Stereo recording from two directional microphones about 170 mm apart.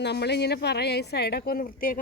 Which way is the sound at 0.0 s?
80° left.